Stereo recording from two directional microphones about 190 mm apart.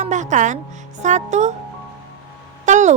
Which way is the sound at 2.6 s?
40° right (ahead or behind).